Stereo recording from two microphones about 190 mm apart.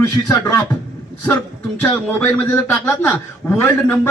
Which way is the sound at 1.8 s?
10° left (ahead or behind).